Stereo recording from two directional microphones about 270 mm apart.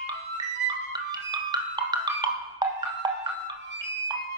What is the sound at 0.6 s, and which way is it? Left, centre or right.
Music, centre.